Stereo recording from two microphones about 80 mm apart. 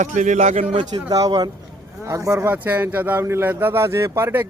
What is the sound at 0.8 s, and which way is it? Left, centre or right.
Speech, right.